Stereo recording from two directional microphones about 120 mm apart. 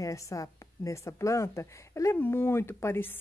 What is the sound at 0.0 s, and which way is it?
Speech, 25° left (ahead or behind).